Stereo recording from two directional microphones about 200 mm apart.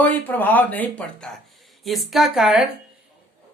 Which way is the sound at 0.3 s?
10° left (ahead or behind).